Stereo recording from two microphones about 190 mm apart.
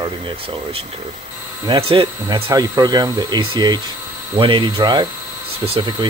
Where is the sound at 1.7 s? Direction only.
25° right (ahead or behind).